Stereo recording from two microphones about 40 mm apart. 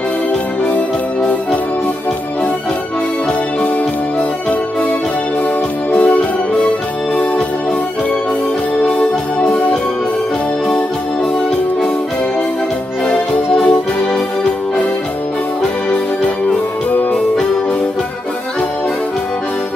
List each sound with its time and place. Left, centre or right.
5.9 s organ: left
9.4 s organ: left
13.1 s music: left
15.9 s music: left